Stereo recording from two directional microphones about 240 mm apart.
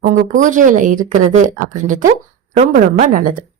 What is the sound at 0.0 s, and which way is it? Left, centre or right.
Speech, right.